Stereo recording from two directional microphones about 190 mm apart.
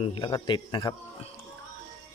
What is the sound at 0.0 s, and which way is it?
Speech, 25° left (ahead or behind).